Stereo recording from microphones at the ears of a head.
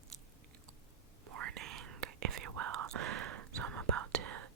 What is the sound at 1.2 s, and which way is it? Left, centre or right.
Whispering, right.